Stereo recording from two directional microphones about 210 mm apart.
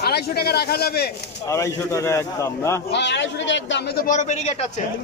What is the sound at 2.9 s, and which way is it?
A man's voice, 55° left (ahead or behind).